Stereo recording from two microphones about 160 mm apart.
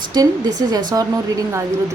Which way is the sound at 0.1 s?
25° right (ahead or behind).